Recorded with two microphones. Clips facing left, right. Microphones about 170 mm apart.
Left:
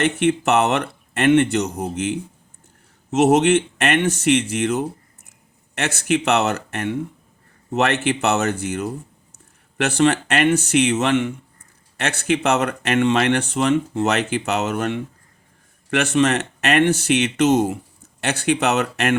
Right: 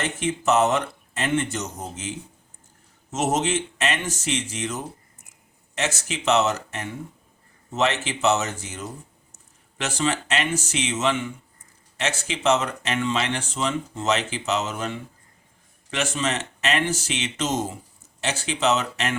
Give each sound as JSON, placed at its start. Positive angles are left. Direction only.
{"t": 0.0, "sound": "speech", "side_deg": 65}